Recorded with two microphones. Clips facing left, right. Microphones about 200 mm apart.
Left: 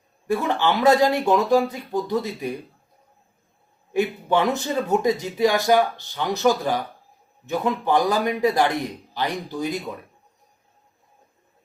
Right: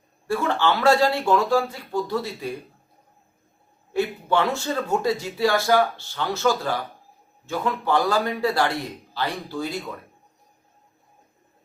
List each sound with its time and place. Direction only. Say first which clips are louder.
0.3 s speech: left 1 dB; 15° left (ahead or behind)
3.9 s speech: left 1 dB; 15° left (ahead or behind)